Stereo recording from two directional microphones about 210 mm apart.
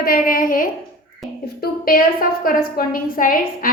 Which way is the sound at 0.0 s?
45° left (ahead or behind).